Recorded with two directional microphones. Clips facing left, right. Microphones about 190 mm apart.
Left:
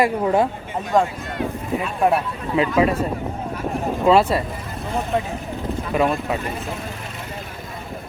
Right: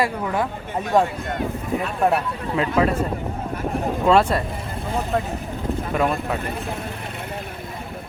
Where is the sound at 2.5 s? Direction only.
10° left (ahead or behind).